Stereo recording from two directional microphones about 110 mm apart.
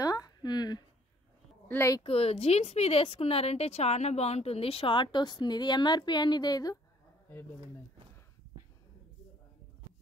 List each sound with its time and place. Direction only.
0.0 s a sound: 35° left (ahead or behind)
1.7 s speech: 25° left (ahead or behind)
2.0 s a woman's voice: 65° left (ahead or behind); by 6.8 s 35° left (ahead or behind)